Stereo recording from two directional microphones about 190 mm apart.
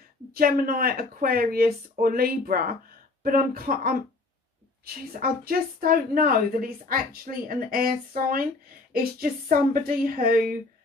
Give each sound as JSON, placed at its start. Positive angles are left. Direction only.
{"t": 0.3, "sound": "speech", "side_deg": -50}